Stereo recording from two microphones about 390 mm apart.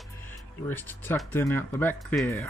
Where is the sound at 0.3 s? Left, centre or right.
Centre.